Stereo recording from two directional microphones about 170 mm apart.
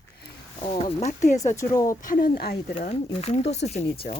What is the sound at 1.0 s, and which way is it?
Speech, 45° left (ahead or behind).